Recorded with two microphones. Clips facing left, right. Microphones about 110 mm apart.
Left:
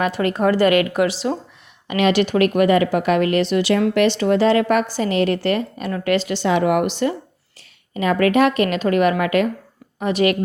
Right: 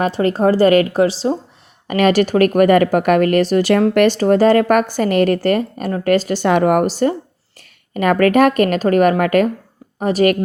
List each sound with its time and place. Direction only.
0.0 s a woman's voice: 35° right (ahead or behind)
1.9 s speech: 45° right (ahead or behind)
7.9 s a woman's voice: 55° right (ahead or behind)